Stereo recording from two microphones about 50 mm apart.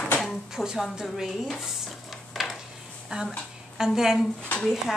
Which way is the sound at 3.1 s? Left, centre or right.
Centre.